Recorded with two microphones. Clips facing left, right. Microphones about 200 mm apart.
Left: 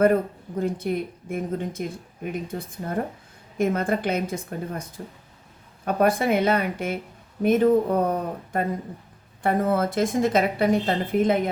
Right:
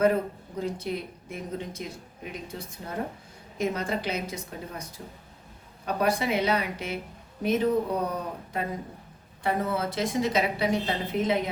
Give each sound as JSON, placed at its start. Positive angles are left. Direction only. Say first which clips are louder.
{"t": 0.6, "sound": "a woman's voice", "louder": "left 5 dB", "side_deg": 50}